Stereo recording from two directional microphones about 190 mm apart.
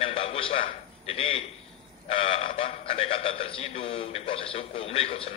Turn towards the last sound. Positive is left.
turn(degrees=30)  # may be behind; listen again after turning